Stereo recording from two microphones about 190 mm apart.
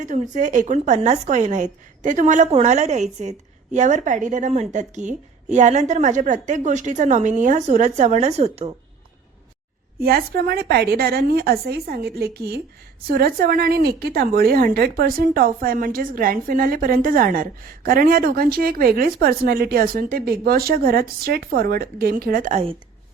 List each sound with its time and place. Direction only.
0.0 s a woman's voice: 40° right (ahead or behind)
10.0 s a woman's voice: 55° right (ahead or behind); by 22.8 s 35° right (ahead or behind)